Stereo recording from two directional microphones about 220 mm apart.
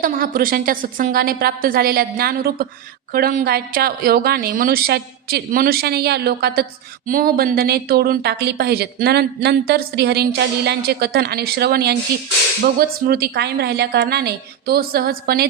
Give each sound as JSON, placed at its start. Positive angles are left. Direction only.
{"t": 0.0, "sound": "a woman's voice", "side_deg": -40}